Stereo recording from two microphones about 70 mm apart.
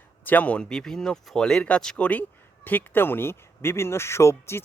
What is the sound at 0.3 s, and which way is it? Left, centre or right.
Speech, left.